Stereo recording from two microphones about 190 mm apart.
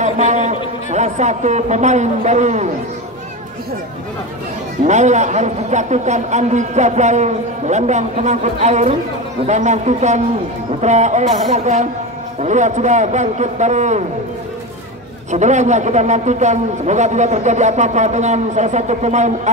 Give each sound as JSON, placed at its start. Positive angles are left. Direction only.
{"t": 0.0, "sound": "a sound", "side_deg": -40}
{"t": 0.9, "sound": "a man's voice", "side_deg": -40}
{"t": 4.8, "sound": "a man's voice", "side_deg": -40}
{"t": 15.3, "sound": "a man's voice", "side_deg": -40}